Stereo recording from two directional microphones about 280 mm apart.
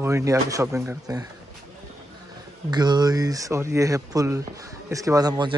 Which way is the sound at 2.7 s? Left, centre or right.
Centre.